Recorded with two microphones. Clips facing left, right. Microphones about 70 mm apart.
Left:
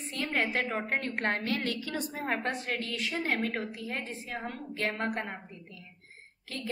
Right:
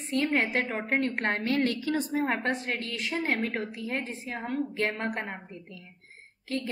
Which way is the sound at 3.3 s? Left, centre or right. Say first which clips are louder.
Right 2 dB; centre.